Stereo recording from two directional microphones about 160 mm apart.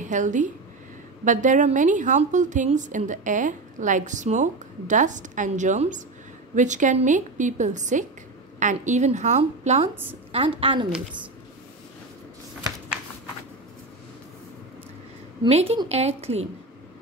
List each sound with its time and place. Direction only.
0.0 s a woman's voice: 50° right (ahead or behind); by 10.9 s 35° right (ahead or behind)
15.4 s a woman's voice: 40° right (ahead or behind)